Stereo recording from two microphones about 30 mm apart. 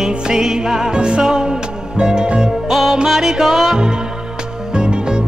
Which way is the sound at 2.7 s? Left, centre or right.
Centre.